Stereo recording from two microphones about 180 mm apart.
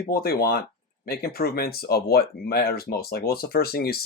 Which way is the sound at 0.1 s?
60° left (ahead or behind).